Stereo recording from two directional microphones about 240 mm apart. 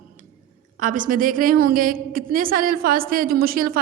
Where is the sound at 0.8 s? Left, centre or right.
Right.